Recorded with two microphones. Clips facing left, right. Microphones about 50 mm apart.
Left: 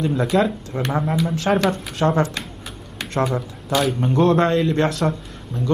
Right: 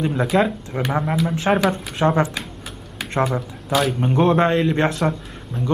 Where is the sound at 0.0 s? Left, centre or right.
Centre.